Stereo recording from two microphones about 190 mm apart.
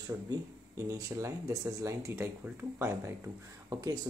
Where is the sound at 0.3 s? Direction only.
15° right (ahead or behind).